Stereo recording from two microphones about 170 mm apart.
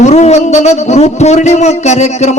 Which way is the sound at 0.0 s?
40° left (ahead or behind).